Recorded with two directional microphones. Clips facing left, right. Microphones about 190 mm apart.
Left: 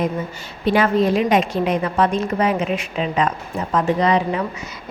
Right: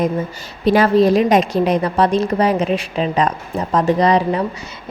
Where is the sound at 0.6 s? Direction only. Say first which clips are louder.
Right 4 dB; 35° right (ahead or behind).